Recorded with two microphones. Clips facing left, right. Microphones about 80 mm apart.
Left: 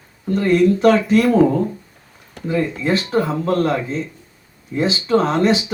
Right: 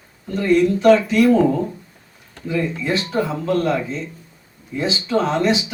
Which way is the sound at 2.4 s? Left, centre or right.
Left.